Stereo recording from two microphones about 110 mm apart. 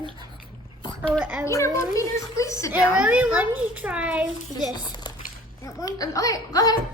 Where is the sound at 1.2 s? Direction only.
15° right (ahead or behind).